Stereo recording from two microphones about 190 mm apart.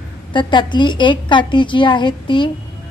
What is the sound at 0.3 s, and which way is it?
A woman's voice, 25° left (ahead or behind).